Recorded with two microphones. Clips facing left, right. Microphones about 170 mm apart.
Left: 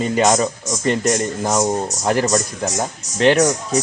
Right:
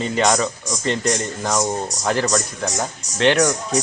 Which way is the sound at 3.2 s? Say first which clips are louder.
Left 2 dB; 5° left (ahead or behind).